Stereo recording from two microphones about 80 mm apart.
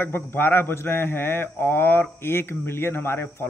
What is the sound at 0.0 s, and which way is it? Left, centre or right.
Speech, left.